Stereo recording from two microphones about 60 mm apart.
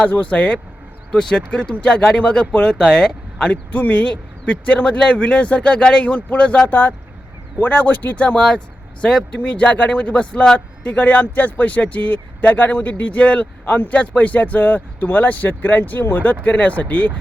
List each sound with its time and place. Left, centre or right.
0.0 s speech: left
3.7 s speech: left
8.4 s speech: centre